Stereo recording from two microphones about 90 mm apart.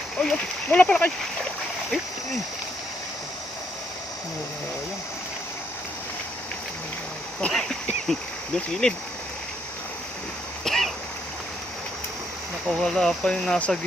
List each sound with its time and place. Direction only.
0.2 s speech: 5° left (ahead or behind)
7.5 s a sound: 5° left (ahead or behind)
8.5 s speech: 10° left (ahead or behind)
10.6 s cough: centre (ahead or behind)
12.6 s speech: 5° left (ahead or behind)